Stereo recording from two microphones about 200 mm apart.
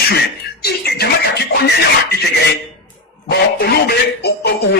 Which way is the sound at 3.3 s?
50° left (ahead or behind).